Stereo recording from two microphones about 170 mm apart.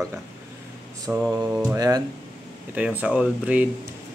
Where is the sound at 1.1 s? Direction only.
10° right (ahead or behind).